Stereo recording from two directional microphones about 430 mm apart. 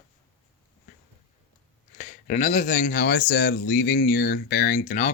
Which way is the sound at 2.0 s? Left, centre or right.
Centre.